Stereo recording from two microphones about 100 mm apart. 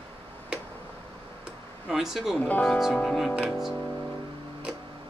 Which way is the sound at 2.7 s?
5° left (ahead or behind).